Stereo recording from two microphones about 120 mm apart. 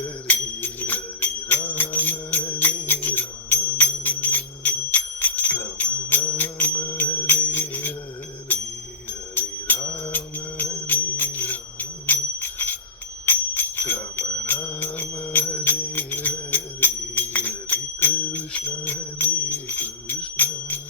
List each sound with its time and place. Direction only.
0.0 s a sound: 15° left (ahead or behind)
1.7 s music: 15° left (ahead or behind)
10.8 s bell: 15° left (ahead or behind)
13.2 s jingle bell: 15° left (ahead or behind)
14.4 s music: 15° left (ahead or behind)
18.8 s bell: 15° left (ahead or behind)